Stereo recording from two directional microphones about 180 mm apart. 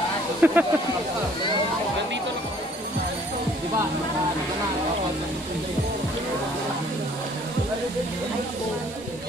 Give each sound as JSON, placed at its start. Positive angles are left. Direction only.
{"t": 0.4, "sound": "speech", "side_deg": -10}